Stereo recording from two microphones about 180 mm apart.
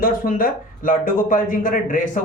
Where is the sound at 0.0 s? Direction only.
50° left (ahead or behind).